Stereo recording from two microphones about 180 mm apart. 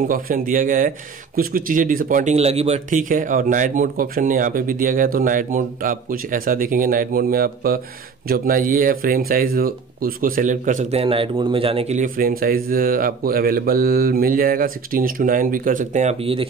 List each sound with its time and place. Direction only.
0.1 s speech: 50° right (ahead or behind); by 16.4 s 30° right (ahead or behind)